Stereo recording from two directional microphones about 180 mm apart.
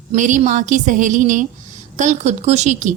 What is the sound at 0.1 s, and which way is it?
A woman's voice, 45° right (ahead or behind).